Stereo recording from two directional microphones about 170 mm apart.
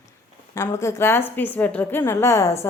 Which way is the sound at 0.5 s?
15° left (ahead or behind).